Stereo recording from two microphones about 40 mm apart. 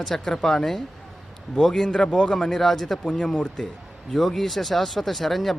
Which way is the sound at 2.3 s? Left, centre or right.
Centre.